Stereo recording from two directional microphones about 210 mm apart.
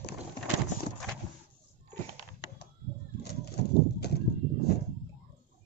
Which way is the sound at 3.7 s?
50° left (ahead or behind).